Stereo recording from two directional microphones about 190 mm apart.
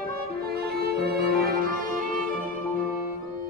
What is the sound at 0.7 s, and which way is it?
Music, 60° right (ahead or behind).